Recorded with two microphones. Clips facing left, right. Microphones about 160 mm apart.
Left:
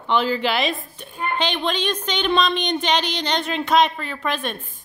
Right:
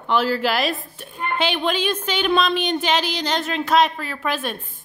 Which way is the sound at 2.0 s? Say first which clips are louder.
Even; 5° right (ahead or behind).